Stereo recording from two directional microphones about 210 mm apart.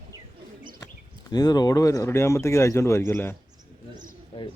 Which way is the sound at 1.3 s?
20° left (ahead or behind).